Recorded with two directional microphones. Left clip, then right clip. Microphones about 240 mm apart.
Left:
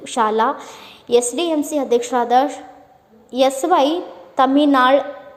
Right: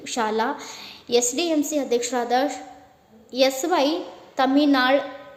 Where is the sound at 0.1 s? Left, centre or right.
Centre.